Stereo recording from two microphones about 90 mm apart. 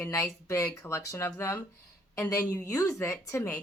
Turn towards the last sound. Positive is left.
turn(degrees=30)  # may be behind; listen again after turning